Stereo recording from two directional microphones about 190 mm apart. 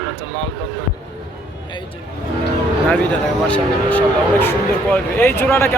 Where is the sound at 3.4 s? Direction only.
10° left (ahead or behind).